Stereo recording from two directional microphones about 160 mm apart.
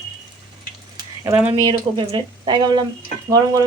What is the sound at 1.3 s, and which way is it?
Speech, 10° right (ahead or behind).